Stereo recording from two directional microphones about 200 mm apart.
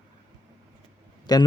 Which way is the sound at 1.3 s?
20° left (ahead or behind).